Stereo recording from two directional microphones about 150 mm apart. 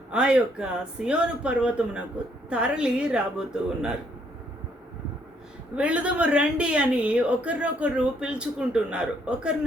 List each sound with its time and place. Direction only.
0.1 s a woman's voice: 5° right (ahead or behind)
5.7 s a woman's voice: 10° right (ahead or behind)